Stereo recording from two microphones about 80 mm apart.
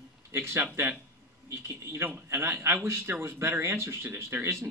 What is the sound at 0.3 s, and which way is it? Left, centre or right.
Speech, right.